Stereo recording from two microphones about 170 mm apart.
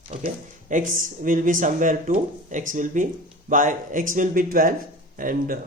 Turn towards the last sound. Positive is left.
turn(degrees=-55)  # may be behind; listen again after turning